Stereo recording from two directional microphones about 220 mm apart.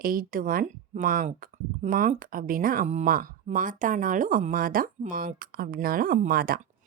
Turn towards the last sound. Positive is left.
turn(degrees=-40)  # may be behind; listen again after turning